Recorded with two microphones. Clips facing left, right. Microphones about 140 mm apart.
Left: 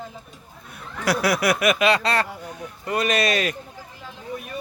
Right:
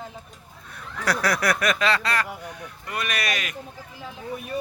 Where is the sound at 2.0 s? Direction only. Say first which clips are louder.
Left 3 dB; 25° left (ahead or behind).